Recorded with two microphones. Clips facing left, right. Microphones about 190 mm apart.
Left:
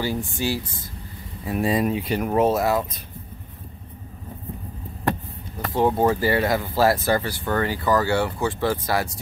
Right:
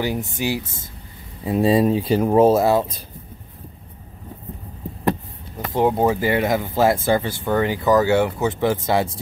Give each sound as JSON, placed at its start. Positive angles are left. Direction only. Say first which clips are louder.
{"t": 0.4, "sound": "speech", "louder": "right 2 dB", "side_deg": -20}
{"t": 5.7, "sound": "speech", "louder": "right 2 dB", "side_deg": -15}